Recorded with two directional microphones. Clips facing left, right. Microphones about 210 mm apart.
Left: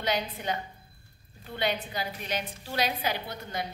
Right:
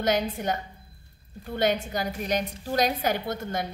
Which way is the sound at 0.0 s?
45° right (ahead or behind).